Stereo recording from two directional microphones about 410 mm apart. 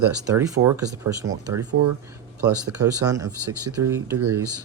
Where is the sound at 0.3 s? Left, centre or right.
Centre.